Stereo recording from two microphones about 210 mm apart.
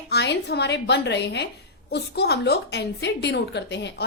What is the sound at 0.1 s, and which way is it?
A woman's voice, 55° left (ahead or behind).